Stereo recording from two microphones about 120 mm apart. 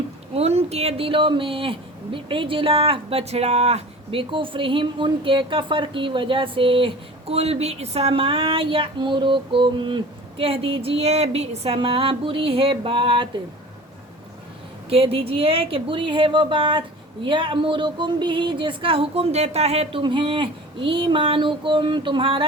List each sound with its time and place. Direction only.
0.3 s speech: 60° right (ahead or behind)
14.8 s speech: 55° right (ahead or behind)
20.0 s speech: 45° right (ahead or behind)